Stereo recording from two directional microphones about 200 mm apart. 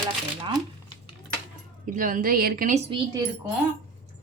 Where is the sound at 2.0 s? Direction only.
40° right (ahead or behind).